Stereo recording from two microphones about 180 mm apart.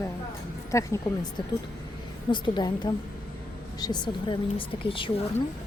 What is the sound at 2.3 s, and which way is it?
Speech, 25° left (ahead or behind).